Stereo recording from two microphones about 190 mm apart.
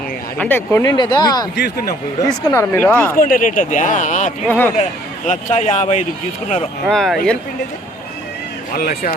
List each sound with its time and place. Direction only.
0.3 s speech: 10° left (ahead or behind)
1.5 s speech: 55° left (ahead or behind)
2.2 s speech: 15° left (ahead or behind)
3.2 s speech: 45° left (ahead or behind)
4.4 s speech: 10° left (ahead or behind)
4.8 s speech: 40° left (ahead or behind)
6.8 s speech: centre (ahead or behind)
8.7 s speech: 50° left (ahead or behind)